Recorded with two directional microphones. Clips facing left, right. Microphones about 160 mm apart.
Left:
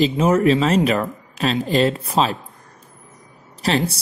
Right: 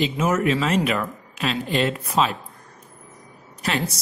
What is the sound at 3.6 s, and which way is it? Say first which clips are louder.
Speech: left 5 dB; 35° left (ahead or behind).